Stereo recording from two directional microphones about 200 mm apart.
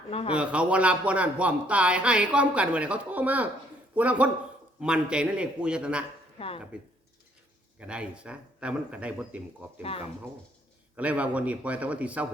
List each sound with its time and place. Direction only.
0.1 s speech: 30° left (ahead or behind)
0.3 s speech: 5° right (ahead or behind)
6.4 s speech: 30° left (ahead or behind)
6.7 s speech: 5° right (ahead or behind)
10.9 s speech: 5° right (ahead or behind)